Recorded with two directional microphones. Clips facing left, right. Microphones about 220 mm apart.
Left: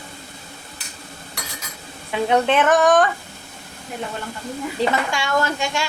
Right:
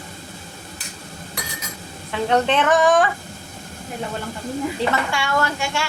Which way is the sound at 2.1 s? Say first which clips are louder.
Left 1 dB; 10° left (ahead or behind).